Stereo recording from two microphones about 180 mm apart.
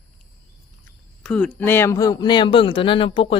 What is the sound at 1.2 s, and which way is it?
Speech, 5° left (ahead or behind).